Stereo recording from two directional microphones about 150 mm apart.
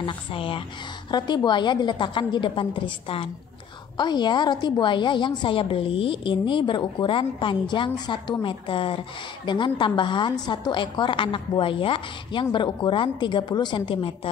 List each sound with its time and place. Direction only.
0.0 s a woman's voice: 35° left (ahead or behind)